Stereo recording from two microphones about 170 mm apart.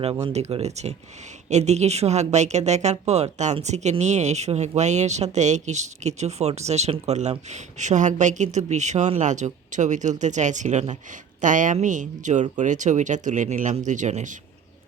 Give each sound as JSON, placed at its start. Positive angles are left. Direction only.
{"t": 0.5, "sound": "speech", "side_deg": -40}